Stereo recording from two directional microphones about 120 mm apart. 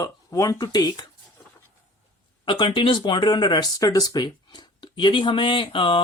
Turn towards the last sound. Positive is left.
turn(degrees=45)  # may be behind; listen again after turning